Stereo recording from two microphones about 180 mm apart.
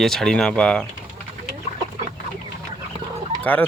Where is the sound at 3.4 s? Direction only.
10° left (ahead or behind).